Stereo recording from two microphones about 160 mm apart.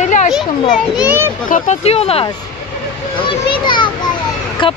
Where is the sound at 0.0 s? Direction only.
50° left (ahead or behind).